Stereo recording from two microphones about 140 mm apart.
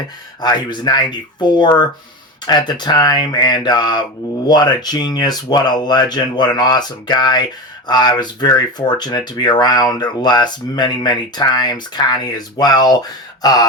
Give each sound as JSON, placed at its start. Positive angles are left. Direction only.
{"t": 0.4, "sound": "speech", "side_deg": 30}